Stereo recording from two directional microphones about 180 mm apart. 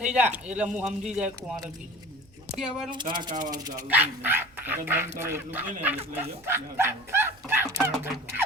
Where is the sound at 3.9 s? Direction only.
10° right (ahead or behind).